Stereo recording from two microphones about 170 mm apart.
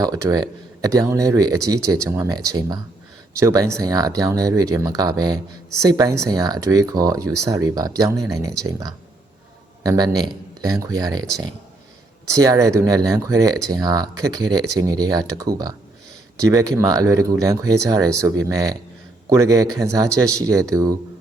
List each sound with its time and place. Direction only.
0.0 s speech: 20° right (ahead or behind)